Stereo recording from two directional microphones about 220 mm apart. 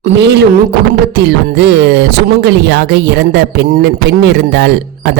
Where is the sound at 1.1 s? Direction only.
50° right (ahead or behind).